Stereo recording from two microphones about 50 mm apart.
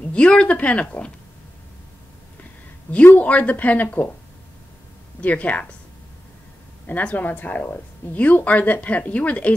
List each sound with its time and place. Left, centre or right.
0.1 s speech: left
3.2 s a woman's voice: left
5.2 s speech: left
6.9 s a woman's voice: left